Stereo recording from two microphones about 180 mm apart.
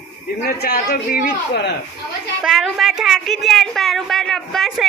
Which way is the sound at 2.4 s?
Centre (ahead or behind).